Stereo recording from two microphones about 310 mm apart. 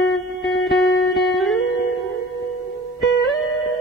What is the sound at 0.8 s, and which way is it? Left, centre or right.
Music, left.